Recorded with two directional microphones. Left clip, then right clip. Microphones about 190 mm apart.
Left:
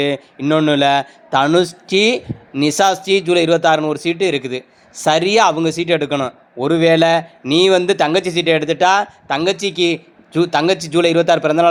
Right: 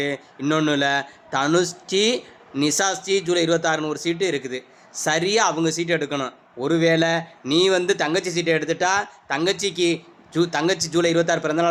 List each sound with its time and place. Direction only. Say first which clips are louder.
0.3 s a man's voice: left 6 dB; 10° left (ahead or behind)